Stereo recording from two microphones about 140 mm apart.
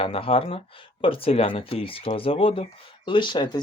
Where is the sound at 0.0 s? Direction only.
40° left (ahead or behind).